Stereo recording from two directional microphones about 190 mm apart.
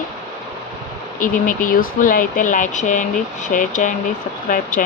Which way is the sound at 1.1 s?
45° left (ahead or behind).